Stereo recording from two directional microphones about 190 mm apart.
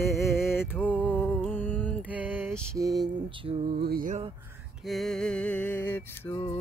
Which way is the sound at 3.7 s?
55° right (ahead or behind).